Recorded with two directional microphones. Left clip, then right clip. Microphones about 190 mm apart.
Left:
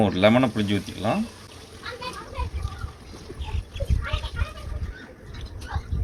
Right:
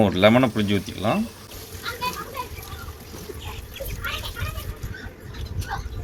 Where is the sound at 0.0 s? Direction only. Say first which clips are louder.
Right 2 dB; 15° right (ahead or behind).